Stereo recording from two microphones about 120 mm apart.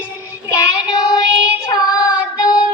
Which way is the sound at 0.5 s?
35° left (ahead or behind).